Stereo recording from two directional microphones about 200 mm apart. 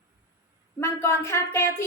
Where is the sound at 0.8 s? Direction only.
15° left (ahead or behind).